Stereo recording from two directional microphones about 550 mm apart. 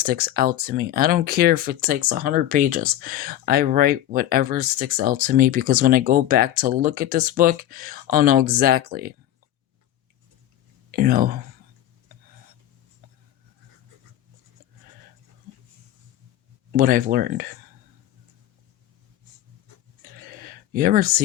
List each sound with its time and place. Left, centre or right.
0.0 s speech: centre
10.9 s speech: centre
16.7 s speech: centre
20.0 s a sound: centre